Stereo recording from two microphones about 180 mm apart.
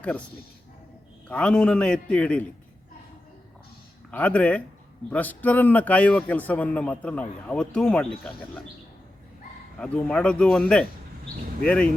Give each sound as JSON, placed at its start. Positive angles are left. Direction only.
{"t": 1.3, "sound": "a man's voice", "side_deg": 5}
{"t": 4.1, "sound": "a man's voice", "side_deg": 5}
{"t": 9.7, "sound": "a man's voice", "side_deg": 5}